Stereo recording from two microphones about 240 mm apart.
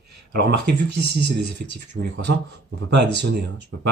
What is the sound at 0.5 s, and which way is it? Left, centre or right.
Speech, right.